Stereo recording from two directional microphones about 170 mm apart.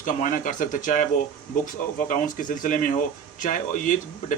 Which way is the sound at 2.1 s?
50° left (ahead or behind).